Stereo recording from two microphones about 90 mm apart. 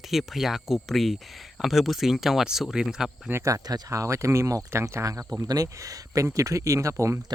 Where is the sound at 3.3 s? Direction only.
30° right (ahead or behind).